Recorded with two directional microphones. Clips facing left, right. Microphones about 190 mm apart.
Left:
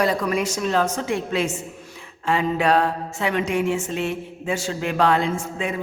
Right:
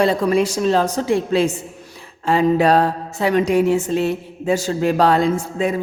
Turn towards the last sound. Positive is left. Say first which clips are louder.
# right 6 dB
turn(degrees=-35)  # may be behind; listen again after turning